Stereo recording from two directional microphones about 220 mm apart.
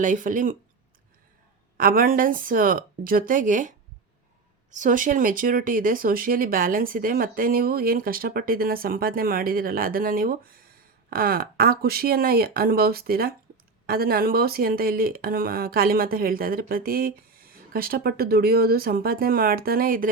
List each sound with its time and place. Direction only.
0.0 s speech: 35° right (ahead or behind)
1.8 s speech: 40° right (ahead or behind)